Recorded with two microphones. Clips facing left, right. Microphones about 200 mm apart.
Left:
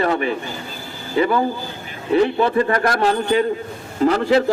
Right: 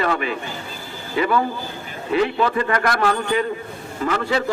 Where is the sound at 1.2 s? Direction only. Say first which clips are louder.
Left 2 dB; 25° left (ahead or behind).